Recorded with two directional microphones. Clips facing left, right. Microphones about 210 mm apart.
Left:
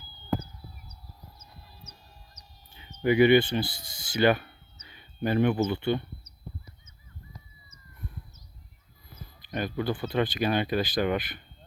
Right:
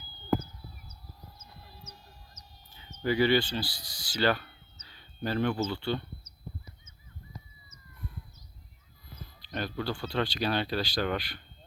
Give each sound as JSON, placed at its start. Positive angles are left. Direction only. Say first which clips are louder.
{"t": 2.7, "sound": "speech", "louder": "left 5 dB", "side_deg": 15}
{"t": 9.5, "sound": "speech", "louder": "left 4 dB", "side_deg": 15}